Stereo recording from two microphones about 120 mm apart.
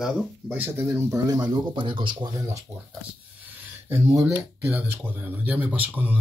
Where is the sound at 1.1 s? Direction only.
35° right (ahead or behind).